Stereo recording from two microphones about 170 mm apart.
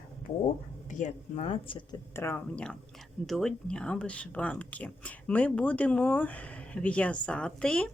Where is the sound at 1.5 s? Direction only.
30° left (ahead or behind).